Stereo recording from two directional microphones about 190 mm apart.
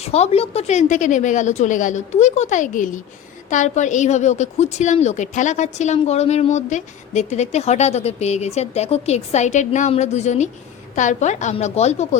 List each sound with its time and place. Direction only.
0.0 s a woman's voice: 35° left (ahead or behind)